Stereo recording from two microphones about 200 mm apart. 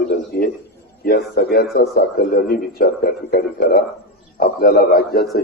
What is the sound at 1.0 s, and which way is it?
A man's voice, 50° left (ahead or behind).